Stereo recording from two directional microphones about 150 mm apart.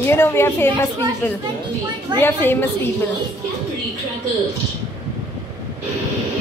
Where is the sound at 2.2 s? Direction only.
15° left (ahead or behind).